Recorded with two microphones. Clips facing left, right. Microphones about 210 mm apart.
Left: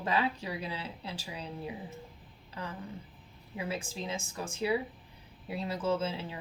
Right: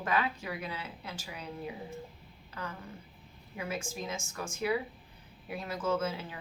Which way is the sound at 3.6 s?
30° left (ahead or behind).